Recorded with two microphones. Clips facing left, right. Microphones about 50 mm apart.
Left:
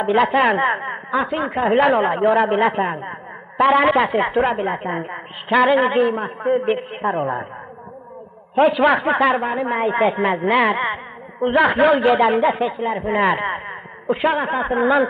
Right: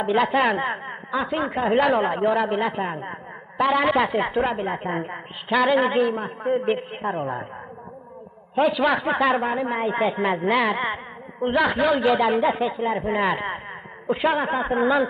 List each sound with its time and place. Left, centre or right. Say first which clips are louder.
0.0 s a woman's voice: left 4 dB; centre
0.4 s a woman's voice: left 5 dB; centre
0.7 s speech: left 7 dB; left
1.1 s a woman's voice: left 3 dB; centre
2.7 s a man's voice: left 6 dB; left
3.0 s a woman's voice: left 3 dB; centre
8.5 s a woman's voice: left 5 dB; centre
13.5 s a sound: left 5 dB; centre
14.2 s a woman's voice: left 2 dB; centre